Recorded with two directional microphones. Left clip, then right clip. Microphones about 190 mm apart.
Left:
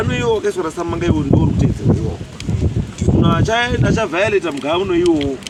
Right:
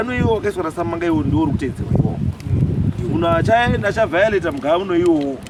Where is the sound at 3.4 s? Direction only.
20° right (ahead or behind).